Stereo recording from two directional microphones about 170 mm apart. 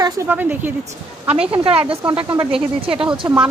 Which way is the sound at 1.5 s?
35° right (ahead or behind).